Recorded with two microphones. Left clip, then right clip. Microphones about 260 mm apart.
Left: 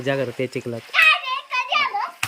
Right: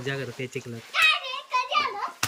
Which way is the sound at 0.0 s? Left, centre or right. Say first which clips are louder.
Left 9 dB; centre.